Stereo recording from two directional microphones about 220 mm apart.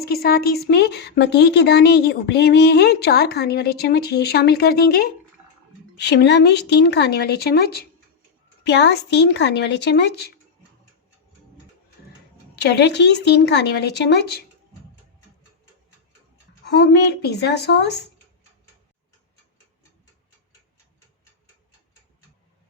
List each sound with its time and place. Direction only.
0.0 s a woman's voice: 45° left (ahead or behind)
12.5 s a woman's voice: 50° left (ahead or behind)
16.6 s a woman's voice: 50° left (ahead or behind)